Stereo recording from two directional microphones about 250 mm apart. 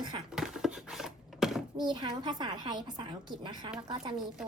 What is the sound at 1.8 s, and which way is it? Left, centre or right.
A woman's voice, centre.